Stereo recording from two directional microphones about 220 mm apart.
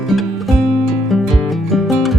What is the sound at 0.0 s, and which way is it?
Music, centre (ahead or behind).